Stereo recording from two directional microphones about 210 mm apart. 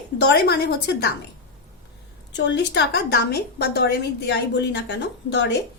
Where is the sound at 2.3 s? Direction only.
55° left (ahead or behind).